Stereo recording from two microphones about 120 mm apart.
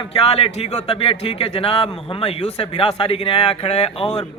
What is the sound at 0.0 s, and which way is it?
Speech, 50° left (ahead or behind).